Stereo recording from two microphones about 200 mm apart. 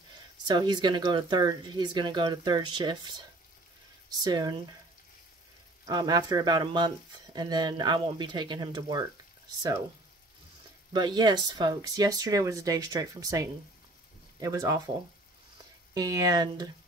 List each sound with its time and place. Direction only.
0.5 s speech: 20° right (ahead or behind)
4.2 s speech: 20° right (ahead or behind)
5.9 s speech: 20° right (ahead or behind)
10.9 s speech: 20° right (ahead or behind)
15.9 s speech: 20° right (ahead or behind)